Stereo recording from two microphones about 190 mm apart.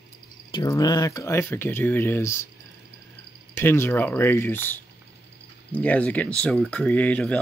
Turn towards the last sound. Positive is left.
turn(degrees=5)  # may be behind; listen again after turning